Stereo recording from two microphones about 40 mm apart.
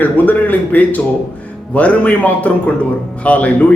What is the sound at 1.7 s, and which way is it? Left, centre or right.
A man's voice, left.